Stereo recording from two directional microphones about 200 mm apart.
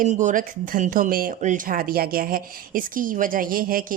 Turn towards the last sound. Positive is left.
turn(degrees=-45)  # may be behind; listen again after turning